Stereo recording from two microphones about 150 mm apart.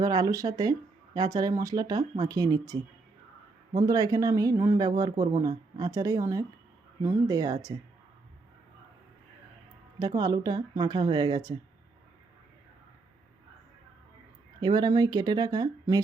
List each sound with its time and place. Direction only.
0.0 s speech: 25° right (ahead or behind)
10.0 s speech: 25° right (ahead or behind)
14.6 s speech: 30° right (ahead or behind)